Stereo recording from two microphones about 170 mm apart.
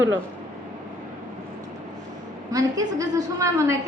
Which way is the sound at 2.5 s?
20° right (ahead or behind).